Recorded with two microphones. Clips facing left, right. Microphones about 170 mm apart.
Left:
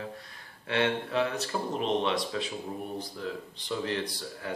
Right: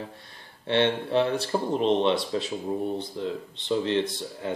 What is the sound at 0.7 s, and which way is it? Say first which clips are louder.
Speech: right 5 dB; 30° right (ahead or behind).